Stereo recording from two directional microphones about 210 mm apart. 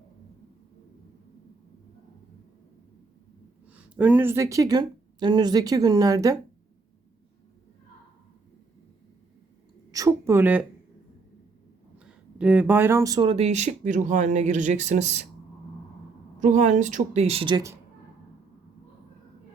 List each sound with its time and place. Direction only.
3.7 s speech: 5° right (ahead or behind)
9.9 s speech: 15° right (ahead or behind)
12.0 s speech: 5° right (ahead or behind); by 15.3 s 35° right (ahead or behind)
16.4 s speech: 35° right (ahead or behind); by 17.7 s 20° right (ahead or behind)